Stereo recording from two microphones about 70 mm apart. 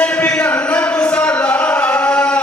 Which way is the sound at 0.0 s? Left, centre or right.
Centre.